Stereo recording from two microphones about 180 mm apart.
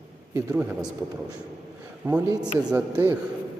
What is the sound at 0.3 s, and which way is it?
Speech, 10° right (ahead or behind).